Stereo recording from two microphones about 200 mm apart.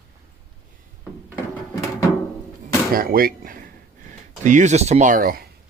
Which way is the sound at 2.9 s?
45° right (ahead or behind).